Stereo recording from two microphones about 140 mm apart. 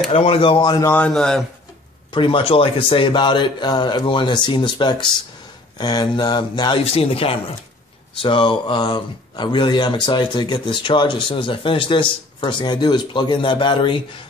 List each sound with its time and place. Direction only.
0.1 s speech: 45° left (ahead or behind)
0.8 s a man's voice: 10° left (ahead or behind)
2.1 s speech: 40° left (ahead or behind)